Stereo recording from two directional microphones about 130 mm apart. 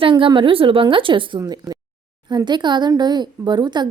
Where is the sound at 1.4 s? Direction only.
30° right (ahead or behind).